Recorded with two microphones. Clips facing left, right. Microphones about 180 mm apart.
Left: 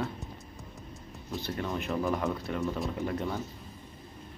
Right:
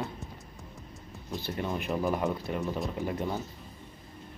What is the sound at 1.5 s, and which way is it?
Speech, 20° right (ahead or behind).